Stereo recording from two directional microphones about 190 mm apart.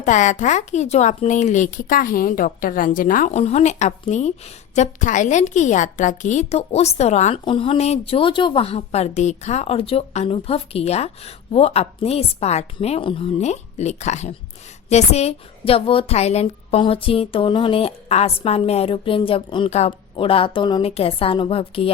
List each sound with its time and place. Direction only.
0.0 s a woman's voice: 40° left (ahead or behind)